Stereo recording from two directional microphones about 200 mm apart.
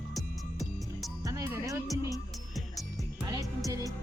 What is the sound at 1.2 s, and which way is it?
Music, 15° right (ahead or behind).